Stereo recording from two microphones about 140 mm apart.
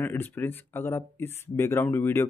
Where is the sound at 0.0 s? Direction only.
15° left (ahead or behind).